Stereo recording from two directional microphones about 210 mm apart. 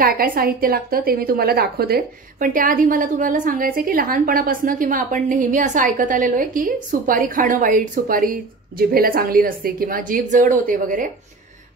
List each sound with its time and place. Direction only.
0.0 s a woman's voice: 45° right (ahead or behind)